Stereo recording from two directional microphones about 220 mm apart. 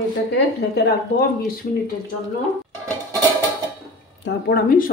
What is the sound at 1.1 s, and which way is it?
Speech, 45° left (ahead or behind).